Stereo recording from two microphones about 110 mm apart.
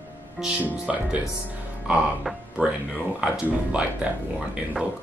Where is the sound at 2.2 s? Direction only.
Centre (ahead or behind).